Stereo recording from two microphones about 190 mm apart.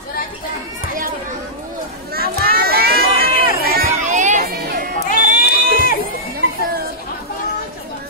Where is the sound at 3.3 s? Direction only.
50° left (ahead or behind).